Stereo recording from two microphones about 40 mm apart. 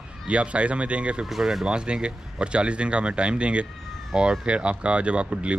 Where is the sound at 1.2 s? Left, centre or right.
Centre.